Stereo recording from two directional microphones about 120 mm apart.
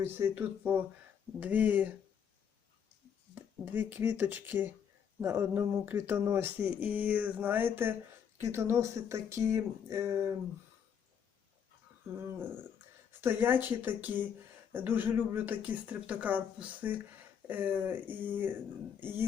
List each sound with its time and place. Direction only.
0.0 s speech: 20° right (ahead or behind)
3.7 s speech: 15° right (ahead or behind)
13.2 s speech: 15° right (ahead or behind)